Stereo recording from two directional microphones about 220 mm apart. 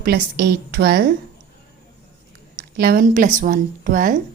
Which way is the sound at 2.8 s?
40° right (ahead or behind).